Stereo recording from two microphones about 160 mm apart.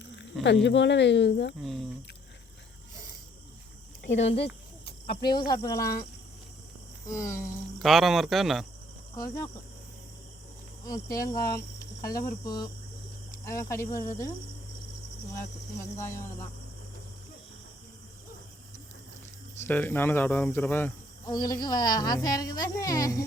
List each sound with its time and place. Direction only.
0.0 s snake: 90° left
0.4 s speech: 90° left
1.5 s speech: centre (ahead or behind)
4.2 s speech: 40° left (ahead or behind)
5.0 s a woman's voice: 25° left (ahead or behind)
7.1 s speech: 15° left (ahead or behind)
7.8 s speech: centre (ahead or behind)
9.1 s a woman's voice: 20° left (ahead or behind)
10.8 s a woman's voice: 20° left (ahead or behind)
15.4 s speech: 15° left (ahead or behind)
19.5 s speech: 10° left (ahead or behind)
21.2 s a woman's voice: 25° left (ahead or behind)